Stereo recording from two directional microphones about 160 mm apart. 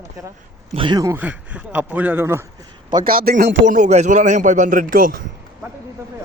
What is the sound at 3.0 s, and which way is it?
A man's voice, 65° right (ahead or behind).